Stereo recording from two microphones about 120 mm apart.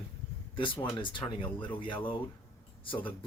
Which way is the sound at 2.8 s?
45° left (ahead or behind).